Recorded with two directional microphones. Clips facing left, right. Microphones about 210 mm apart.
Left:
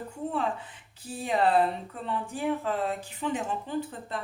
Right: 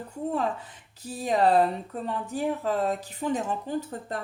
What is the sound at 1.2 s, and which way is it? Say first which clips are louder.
Speech: right 2 dB; 40° right (ahead or behind).